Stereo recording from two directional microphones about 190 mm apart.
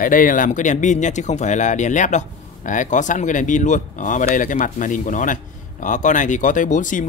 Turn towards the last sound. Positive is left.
turn(degrees=40)  # may be behind; listen again after turning